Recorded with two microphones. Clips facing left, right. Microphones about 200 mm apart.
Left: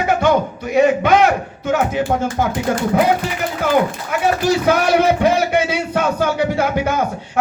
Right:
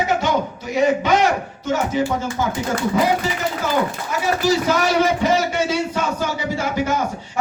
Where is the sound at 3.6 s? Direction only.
55° left (ahead or behind).